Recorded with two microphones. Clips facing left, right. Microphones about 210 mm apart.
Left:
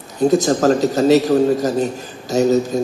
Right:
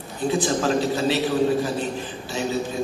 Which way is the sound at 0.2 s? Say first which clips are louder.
Left 8 dB; 40° left (ahead or behind).